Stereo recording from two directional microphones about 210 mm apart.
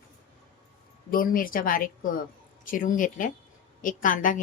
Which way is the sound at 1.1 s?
40° left (ahead or behind).